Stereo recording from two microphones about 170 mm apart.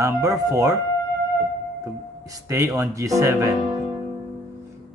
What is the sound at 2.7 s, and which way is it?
Speech, 20° right (ahead or behind).